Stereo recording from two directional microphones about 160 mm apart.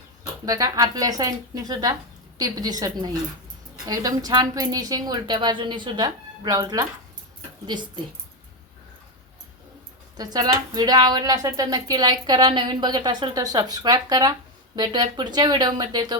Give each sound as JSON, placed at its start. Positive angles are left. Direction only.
{"t": 0.4, "sound": "a woman's voice", "side_deg": -20}
{"t": 10.2, "sound": "a woman's voice", "side_deg": -25}